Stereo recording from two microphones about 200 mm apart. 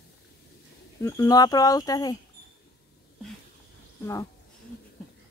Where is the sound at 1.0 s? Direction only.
15° left (ahead or behind).